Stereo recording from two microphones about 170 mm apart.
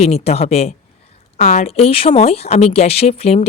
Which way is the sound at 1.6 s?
35° left (ahead or behind).